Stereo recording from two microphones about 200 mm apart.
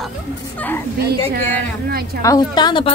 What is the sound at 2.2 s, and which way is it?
Speech, 20° left (ahead or behind).